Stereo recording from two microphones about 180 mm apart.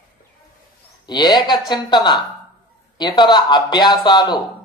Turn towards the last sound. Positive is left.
turn(degrees=25)  # may be behind; listen again after turning